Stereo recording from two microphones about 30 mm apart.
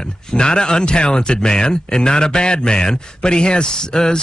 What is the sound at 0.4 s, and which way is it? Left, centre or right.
A man's voice, left.